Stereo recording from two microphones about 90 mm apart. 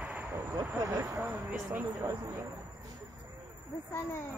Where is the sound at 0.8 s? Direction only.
30° right (ahead or behind).